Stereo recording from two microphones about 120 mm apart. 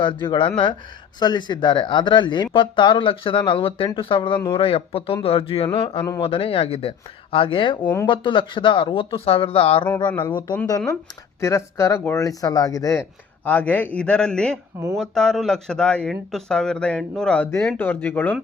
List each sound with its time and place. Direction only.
0.0 s speech: 40° left (ahead or behind)
9.9 s speech: 15° left (ahead or behind)
10.7 s speech: 30° left (ahead or behind)
13.0 s speech: 15° left (ahead or behind)